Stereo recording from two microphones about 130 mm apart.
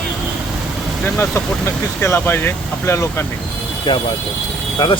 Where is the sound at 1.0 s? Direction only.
20° left (ahead or behind).